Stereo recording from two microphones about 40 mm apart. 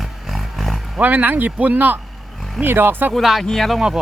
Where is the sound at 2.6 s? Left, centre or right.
Right.